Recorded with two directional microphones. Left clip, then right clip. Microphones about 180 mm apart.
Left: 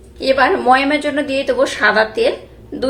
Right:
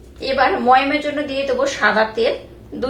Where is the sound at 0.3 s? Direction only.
45° left (ahead or behind).